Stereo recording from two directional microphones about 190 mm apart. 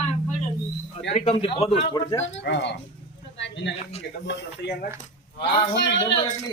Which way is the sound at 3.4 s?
65° left (ahead or behind).